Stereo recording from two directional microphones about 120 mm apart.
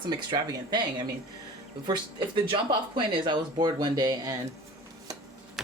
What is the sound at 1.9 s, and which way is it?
Speech, 40° right (ahead or behind).